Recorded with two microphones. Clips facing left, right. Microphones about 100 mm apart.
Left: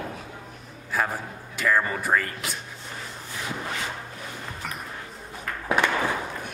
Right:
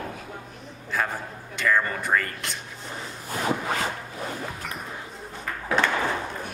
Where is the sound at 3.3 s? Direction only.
50° right (ahead or behind).